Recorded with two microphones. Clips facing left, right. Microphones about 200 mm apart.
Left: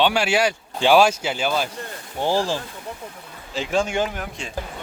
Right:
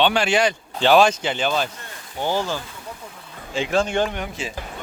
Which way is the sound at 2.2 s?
30° left (ahead or behind).